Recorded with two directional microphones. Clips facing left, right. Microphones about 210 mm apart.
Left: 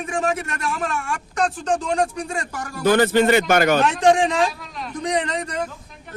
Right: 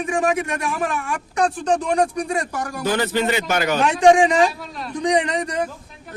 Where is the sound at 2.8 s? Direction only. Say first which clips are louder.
Left 6 dB; 55° left (ahead or behind).